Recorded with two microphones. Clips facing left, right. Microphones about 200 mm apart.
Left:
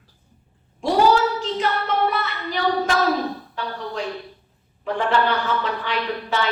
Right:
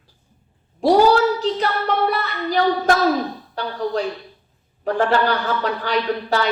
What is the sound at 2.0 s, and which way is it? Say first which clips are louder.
A woman's voice: right 3 dB; 35° right (ahead or behind).